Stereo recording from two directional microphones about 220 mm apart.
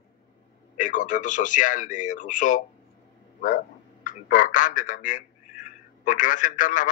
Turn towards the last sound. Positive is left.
turn(degrees=35)  # may be behind; listen again after turning